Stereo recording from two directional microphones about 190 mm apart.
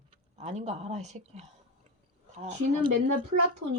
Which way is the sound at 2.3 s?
35° right (ahead or behind).